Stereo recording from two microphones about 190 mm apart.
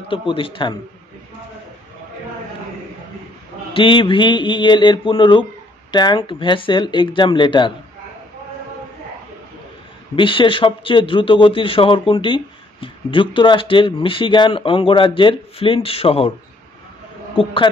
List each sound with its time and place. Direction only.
0.1 s speech: 25° left (ahead or behind)
3.7 s speech: 25° left (ahead or behind)
10.1 s speech: 25° left (ahead or behind)
17.4 s speech: 30° left (ahead or behind)